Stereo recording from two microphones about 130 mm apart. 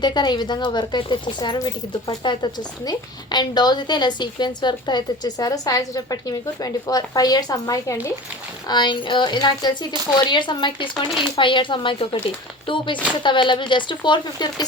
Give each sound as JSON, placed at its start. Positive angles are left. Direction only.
{"t": 0.0, "sound": "speech", "side_deg": 35}